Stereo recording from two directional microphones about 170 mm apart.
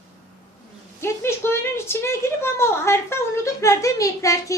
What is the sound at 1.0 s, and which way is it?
A woman's voice, 15° left (ahead or behind).